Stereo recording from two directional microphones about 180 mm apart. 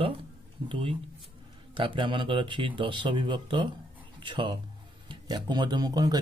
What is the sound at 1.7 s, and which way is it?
Speech, 30° right (ahead or behind).